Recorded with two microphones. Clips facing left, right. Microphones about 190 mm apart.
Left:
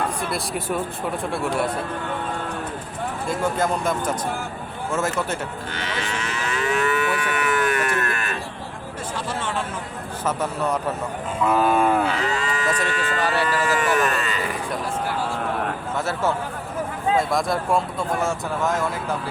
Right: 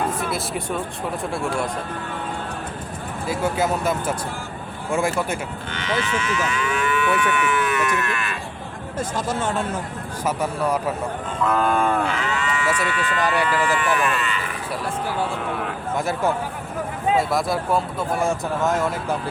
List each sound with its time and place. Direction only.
0.2 s speech: centre (ahead or behind)
3.2 s speech: 5° right (ahead or behind)
5.7 s moo: 35° left (ahead or behind)
9.0 s speech: 45° right (ahead or behind)
10.2 s speech: 10° right (ahead or behind)
11.3 s cattle: 5° left (ahead or behind)
12.1 s speech: 35° left (ahead or behind)
13.4 s moo: 40° left (ahead or behind)
16.0 s speech: 15° right (ahead or behind)